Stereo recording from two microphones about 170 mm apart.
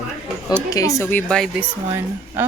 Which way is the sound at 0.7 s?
20° left (ahead or behind).